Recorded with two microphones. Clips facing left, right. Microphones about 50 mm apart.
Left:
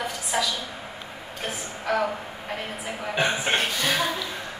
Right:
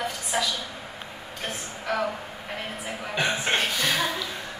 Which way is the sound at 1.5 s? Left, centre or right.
Centre.